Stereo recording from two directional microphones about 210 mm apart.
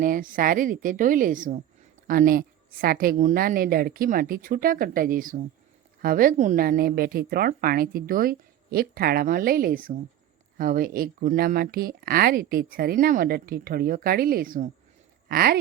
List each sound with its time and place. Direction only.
0.0 s a woman's voice: 40° right (ahead or behind)